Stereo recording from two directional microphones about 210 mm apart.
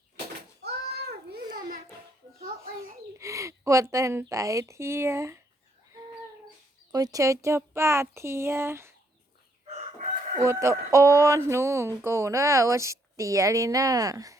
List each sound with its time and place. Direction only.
0.6 s a sound: 50° right (ahead or behind)
1.5 s a sound: 20° right (ahead or behind)
3.2 s a woman's voice: 15° right (ahead or behind)
6.9 s speech: 15° right (ahead or behind)
9.6 s chicken: 30° right (ahead or behind)
10.4 s speech: 15° right (ahead or behind)